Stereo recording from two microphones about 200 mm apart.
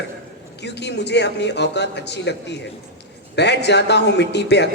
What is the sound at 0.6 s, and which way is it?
A man's voice, 60° left (ahead or behind).